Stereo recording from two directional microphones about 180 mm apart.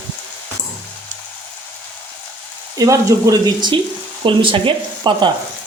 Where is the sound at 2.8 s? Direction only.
15° right (ahead or behind).